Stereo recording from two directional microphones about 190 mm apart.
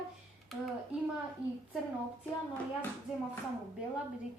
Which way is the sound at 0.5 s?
Centre (ahead or behind).